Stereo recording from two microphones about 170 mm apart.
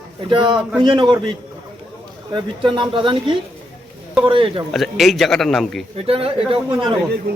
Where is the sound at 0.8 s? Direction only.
25° right (ahead or behind).